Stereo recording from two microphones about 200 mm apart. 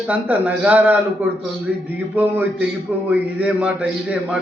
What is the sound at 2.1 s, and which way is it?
A man's voice, 10° right (ahead or behind).